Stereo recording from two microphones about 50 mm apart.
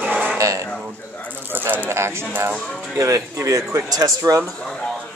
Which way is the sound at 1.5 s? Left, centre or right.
Right.